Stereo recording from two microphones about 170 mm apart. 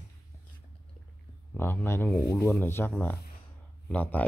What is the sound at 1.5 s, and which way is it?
Speech, 15° left (ahead or behind).